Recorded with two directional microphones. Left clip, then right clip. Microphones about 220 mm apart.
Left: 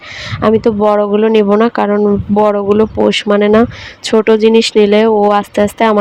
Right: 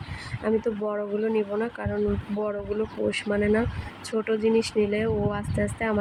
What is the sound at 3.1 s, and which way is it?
Speech, 35° left (ahead or behind).